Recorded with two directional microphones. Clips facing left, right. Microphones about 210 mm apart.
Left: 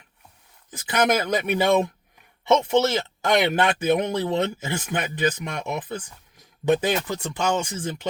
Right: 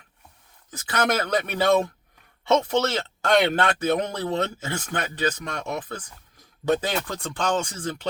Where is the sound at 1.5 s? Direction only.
15° left (ahead or behind).